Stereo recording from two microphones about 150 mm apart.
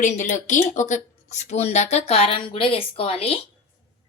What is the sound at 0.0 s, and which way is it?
A woman's voice, 55° left (ahead or behind).